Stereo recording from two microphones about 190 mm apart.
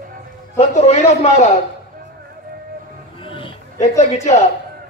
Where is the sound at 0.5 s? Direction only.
35° left (ahead or behind).